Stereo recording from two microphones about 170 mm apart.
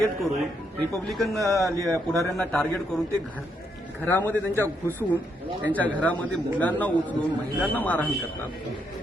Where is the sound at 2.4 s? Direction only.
5° left (ahead or behind).